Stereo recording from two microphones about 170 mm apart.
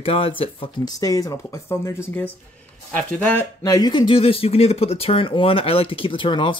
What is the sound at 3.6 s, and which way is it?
Speech, 25° left (ahead or behind).